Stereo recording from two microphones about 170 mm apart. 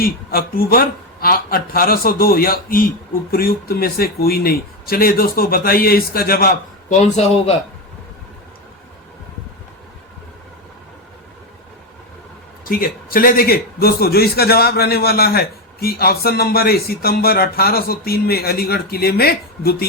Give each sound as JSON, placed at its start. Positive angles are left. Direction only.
{"t": 0.0, "sound": "a man's voice", "side_deg": 60}
{"t": 6.9, "sound": "a man's voice", "side_deg": 40}
{"t": 12.6, "sound": "a man's voice", "side_deg": 60}